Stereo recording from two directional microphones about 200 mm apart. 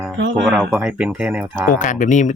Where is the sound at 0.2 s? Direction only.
65° right (ahead or behind).